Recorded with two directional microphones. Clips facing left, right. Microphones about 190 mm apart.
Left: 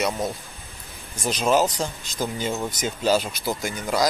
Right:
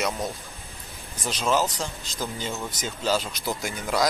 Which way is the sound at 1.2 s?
15° left (ahead or behind).